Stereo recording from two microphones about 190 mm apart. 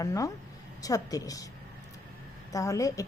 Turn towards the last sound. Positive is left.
turn(degrees=15)  # may be behind; listen again after turning